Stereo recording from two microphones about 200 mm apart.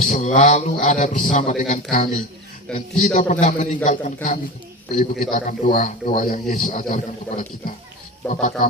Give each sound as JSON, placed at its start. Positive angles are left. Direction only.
{"t": 0.0, "sound": "a man's voice", "side_deg": 35}